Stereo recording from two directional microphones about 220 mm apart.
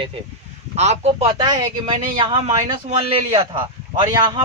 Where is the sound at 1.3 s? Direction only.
20° right (ahead or behind).